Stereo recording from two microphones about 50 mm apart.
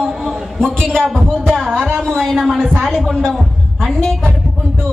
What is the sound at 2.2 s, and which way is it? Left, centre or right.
A man's voice, centre.